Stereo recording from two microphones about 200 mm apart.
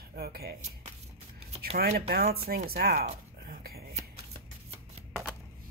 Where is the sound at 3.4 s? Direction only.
50° right (ahead or behind).